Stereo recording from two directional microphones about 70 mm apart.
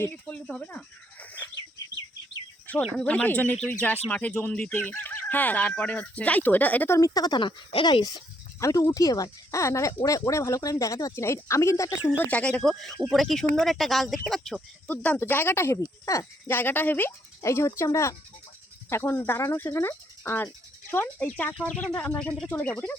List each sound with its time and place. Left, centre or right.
0.1 s speech: left
2.9 s speech: centre
7.1 s speech: left
8.6 s speech: left
12.3 s speech: centre
12.6 s speech: centre
14.8 s speech: left
15.2 s speech: left
15.8 s speech: left
16.5 s speech: left
17.4 s speech: left
21.2 s speech: left